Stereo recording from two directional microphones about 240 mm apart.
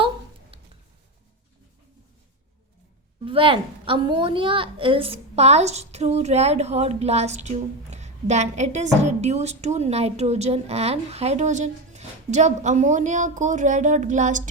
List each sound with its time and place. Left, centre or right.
3.2 s a woman's voice: right